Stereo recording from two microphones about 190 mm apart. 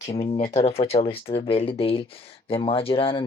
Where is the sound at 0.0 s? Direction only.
35° left (ahead or behind).